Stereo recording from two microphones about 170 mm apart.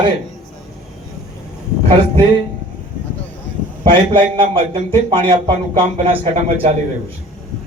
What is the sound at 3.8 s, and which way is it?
A man's voice, 30° right (ahead or behind).